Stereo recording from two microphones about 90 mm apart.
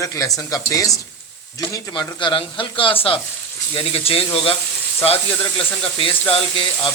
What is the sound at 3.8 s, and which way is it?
Speech, 90° left.